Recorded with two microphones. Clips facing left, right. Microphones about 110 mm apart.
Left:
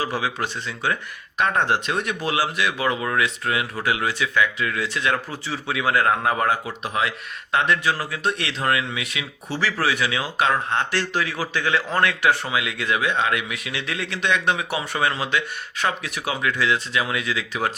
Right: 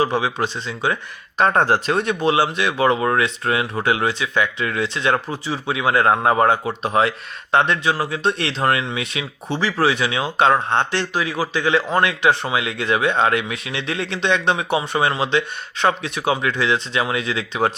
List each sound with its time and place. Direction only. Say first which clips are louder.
0.0 s speech: right 5 dB; 25° right (ahead or behind)
1.4 s speech: right 4 dB; 35° right (ahead or behind)
11.0 s speech: right 3 dB; 15° right (ahead or behind)